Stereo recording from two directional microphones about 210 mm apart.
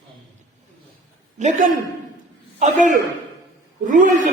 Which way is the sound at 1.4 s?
35° right (ahead or behind).